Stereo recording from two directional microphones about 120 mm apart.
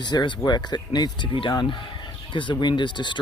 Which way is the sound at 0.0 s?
40° left (ahead or behind).